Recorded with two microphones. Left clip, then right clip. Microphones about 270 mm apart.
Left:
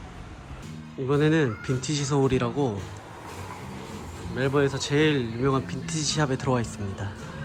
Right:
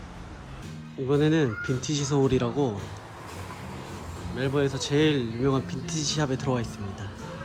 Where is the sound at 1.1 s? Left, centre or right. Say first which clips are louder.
Left 1 dB; centre.